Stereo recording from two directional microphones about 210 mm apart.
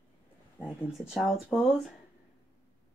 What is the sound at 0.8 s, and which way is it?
Speech, 5° right (ahead or behind).